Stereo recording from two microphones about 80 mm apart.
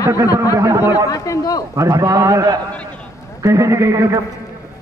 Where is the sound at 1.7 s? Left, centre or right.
Right.